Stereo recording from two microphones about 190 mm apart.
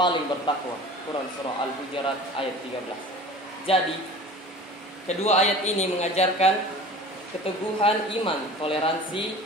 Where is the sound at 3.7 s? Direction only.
30° left (ahead or behind).